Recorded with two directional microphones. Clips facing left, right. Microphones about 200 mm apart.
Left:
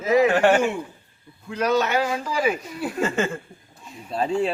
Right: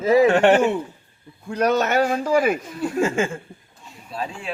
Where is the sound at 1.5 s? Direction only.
40° right (ahead or behind).